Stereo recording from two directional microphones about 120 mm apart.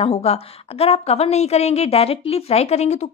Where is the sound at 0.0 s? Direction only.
60° left (ahead or behind).